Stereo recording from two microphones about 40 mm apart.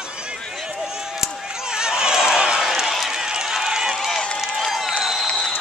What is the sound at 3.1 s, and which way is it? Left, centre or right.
Run, centre.